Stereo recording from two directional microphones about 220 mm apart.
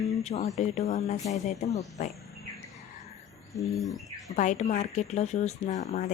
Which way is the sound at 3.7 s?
Centre (ahead or behind).